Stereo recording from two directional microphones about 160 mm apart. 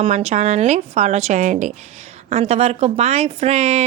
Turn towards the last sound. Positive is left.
turn(degrees=-40)  # may be behind; listen again after turning